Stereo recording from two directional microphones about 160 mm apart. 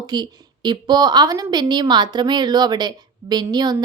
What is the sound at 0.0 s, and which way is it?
A woman's voice, 25° right (ahead or behind).